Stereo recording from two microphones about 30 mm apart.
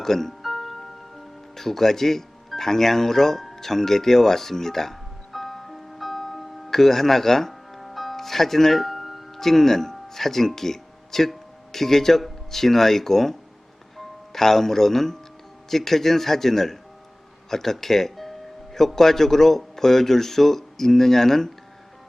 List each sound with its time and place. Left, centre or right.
0.0 s speech: centre
0.4 s music: centre
1.5 s speech: centre
5.3 s music: centre
9.4 s speech: centre